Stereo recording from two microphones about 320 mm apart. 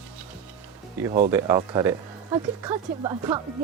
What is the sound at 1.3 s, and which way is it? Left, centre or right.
Speech, centre.